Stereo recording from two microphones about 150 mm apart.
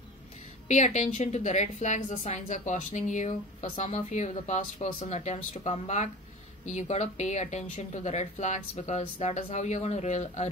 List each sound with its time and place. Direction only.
0.7 s a woman's voice: 55° left (ahead or behind)